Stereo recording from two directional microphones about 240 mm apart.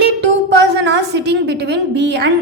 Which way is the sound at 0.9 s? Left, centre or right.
Right.